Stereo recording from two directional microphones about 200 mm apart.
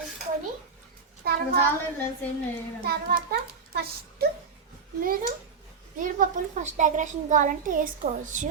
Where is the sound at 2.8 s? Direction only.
50° right (ahead or behind).